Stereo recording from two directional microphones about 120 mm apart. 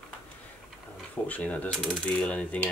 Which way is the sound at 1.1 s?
10° left (ahead or behind).